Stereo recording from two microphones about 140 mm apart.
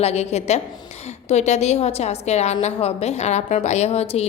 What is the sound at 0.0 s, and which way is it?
A woman's voice, 50° left (ahead or behind).